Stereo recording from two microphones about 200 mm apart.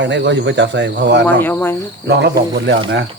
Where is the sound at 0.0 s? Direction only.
60° right (ahead or behind).